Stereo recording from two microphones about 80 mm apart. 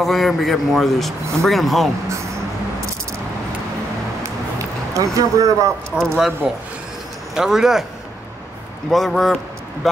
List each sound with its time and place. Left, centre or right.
0.0 s speech: centre
4.9 s speech: right
5.9 s speech: centre
7.3 s speech: centre
8.9 s speech: centre